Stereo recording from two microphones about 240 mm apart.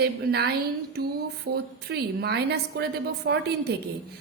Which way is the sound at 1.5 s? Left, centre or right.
Right.